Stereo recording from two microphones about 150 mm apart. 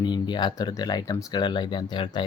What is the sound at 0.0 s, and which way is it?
Speech, 30° left (ahead or behind).